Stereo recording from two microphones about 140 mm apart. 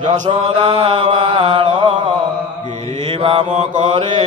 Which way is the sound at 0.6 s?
35° right (ahead or behind).